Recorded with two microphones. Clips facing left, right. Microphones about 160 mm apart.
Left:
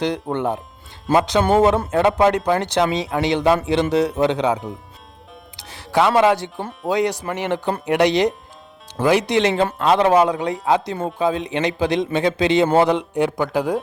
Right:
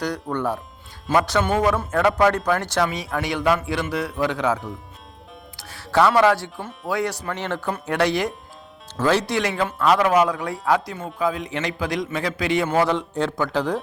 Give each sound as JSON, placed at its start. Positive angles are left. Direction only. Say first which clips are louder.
{"t": 0.0, "sound": "speech", "louder": "left 3 dB", "side_deg": 25}
{"t": 1.4, "sound": "speech", "louder": "left 5 dB", "side_deg": 30}
{"t": 5.5, "sound": "music", "louder": "even", "side_deg": 20}
{"t": 6.8, "sound": "speech", "louder": "left 5 dB", "side_deg": 20}
{"t": 12.9, "sound": "speech", "louder": "left 4 dB", "side_deg": 15}